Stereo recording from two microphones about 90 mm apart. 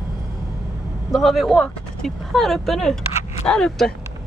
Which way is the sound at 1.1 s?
Centre (ahead or behind).